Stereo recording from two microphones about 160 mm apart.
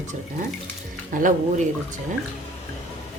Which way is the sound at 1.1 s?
60° right (ahead or behind).